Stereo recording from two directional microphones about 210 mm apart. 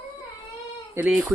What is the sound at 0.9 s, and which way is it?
Speech, 10° right (ahead or behind).